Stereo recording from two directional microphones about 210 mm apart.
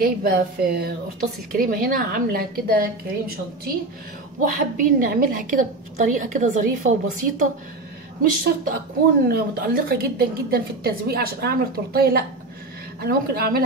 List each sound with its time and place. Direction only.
0.0 s a woman's voice: 45° right (ahead or behind)